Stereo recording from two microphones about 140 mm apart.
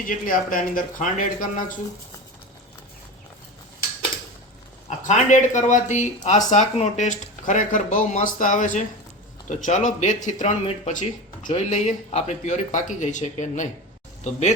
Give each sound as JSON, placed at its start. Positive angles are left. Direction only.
{"t": 0.0, "sound": "speech", "side_deg": 75}
{"t": 5.0, "sound": "speech", "side_deg": 60}